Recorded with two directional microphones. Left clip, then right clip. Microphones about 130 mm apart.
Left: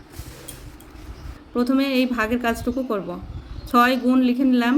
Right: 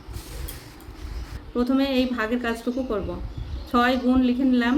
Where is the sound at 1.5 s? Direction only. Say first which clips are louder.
Left 2 dB; 50° left (ahead or behind).